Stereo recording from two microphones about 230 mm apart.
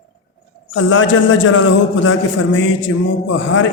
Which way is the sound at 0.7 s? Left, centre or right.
Left.